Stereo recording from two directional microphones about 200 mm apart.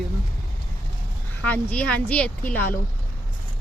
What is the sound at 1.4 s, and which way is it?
Speech, 5° left (ahead or behind).